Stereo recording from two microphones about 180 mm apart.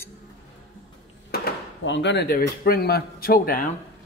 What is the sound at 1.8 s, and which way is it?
A man's voice, 85° left.